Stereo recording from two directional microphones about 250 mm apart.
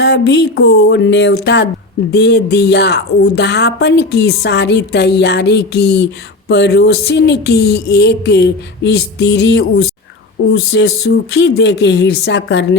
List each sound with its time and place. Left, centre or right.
0.0 s a woman's voice: left